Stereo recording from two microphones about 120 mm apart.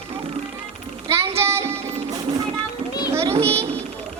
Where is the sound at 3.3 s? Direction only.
55° right (ahead or behind).